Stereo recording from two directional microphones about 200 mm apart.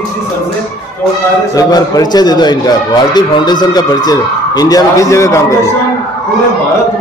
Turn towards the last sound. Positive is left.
turn(degrees=15)  # may be behind; listen again after turning